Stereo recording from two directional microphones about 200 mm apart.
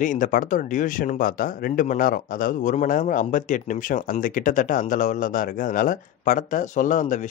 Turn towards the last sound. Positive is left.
turn(degrees=40)  # may be behind; listen again after turning